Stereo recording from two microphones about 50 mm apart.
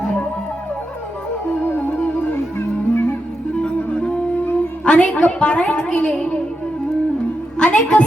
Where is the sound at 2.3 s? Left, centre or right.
Left.